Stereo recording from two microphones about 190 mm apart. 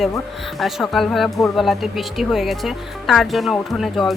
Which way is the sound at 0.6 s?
Centre (ahead or behind).